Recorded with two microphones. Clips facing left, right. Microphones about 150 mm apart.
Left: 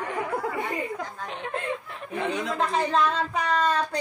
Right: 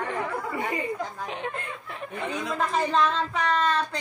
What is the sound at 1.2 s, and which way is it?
Speech, centre (ahead or behind).